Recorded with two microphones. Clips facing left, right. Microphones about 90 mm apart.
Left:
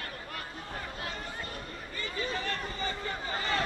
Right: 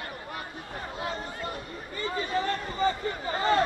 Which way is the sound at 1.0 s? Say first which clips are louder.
Right 5 dB; 25° right (ahead or behind).